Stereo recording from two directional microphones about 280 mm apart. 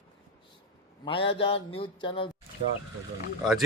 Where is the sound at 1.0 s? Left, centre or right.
Centre.